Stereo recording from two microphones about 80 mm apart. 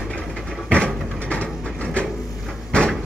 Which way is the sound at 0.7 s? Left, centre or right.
Centre.